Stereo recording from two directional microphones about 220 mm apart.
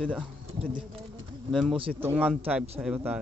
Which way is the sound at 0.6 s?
25° right (ahead or behind).